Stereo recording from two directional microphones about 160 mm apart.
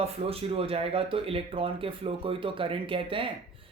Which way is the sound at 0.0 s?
35° right (ahead or behind).